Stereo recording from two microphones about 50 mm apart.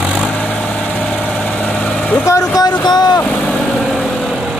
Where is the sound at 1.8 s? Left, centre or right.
Left.